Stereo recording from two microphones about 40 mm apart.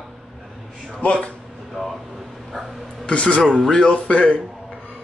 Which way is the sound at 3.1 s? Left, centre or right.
Left.